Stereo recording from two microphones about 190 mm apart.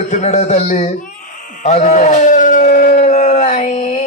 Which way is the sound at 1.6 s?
40° left (ahead or behind).